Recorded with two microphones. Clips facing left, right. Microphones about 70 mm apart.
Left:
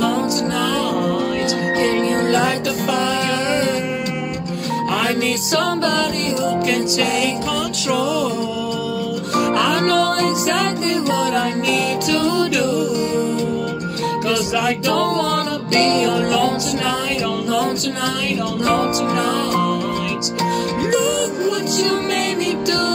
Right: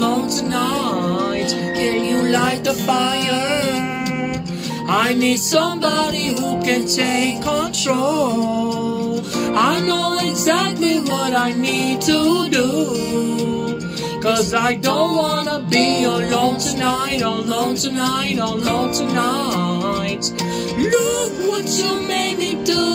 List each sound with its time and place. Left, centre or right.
1.8 s music: left
5.0 s music: left
6.7 s music: right
9.8 s music: left
14.2 s music: right
15.7 s music: left
20.8 s music: left